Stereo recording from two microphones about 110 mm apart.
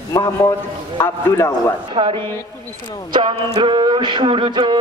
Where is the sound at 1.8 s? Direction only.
50° right (ahead or behind).